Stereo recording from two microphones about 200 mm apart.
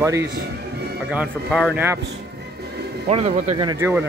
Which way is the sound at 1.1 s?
5° right (ahead or behind).